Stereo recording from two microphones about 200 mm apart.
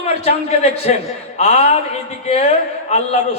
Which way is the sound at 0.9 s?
35° left (ahead or behind).